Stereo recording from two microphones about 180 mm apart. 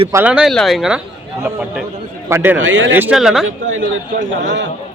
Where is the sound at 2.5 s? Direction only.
90° right.